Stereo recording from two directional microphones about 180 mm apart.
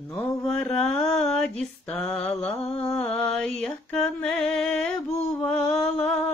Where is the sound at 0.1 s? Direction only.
5° left (ahead or behind).